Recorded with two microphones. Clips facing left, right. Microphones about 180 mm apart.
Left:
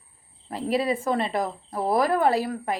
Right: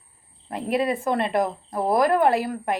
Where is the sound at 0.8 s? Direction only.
Centre (ahead or behind).